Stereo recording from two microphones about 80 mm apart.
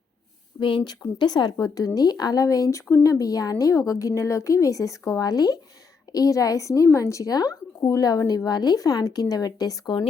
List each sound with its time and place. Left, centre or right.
1.2 s speech: left
8.4 s speech: left